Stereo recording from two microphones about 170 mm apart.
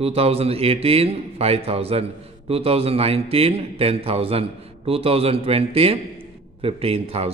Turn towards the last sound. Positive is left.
turn(degrees=-35)  # may be behind; listen again after turning